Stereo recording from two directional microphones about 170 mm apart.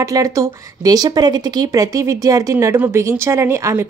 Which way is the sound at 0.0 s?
20° right (ahead or behind).